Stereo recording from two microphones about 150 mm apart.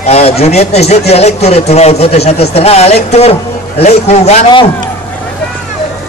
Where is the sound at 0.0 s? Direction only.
45° left (ahead or behind).